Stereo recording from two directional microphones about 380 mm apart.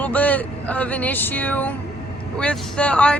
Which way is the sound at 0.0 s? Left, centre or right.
Centre.